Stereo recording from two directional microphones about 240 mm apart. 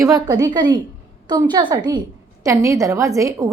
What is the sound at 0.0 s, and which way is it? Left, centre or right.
A woman's voice, centre.